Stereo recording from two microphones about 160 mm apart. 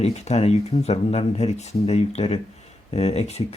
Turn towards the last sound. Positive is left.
turn(degrees=40)  # may be behind; listen again after turning